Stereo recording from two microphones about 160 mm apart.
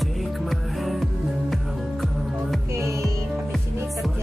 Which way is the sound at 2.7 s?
15° right (ahead or behind).